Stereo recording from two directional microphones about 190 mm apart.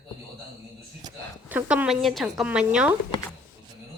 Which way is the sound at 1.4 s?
10° right (ahead or behind).